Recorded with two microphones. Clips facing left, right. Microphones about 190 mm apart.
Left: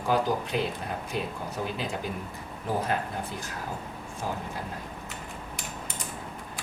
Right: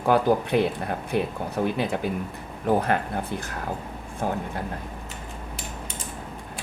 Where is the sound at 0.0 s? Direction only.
60° right (ahead or behind).